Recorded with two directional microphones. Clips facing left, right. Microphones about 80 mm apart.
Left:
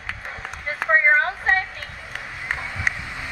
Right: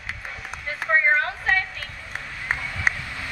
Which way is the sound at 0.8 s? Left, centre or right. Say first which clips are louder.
Left 3 dB; left.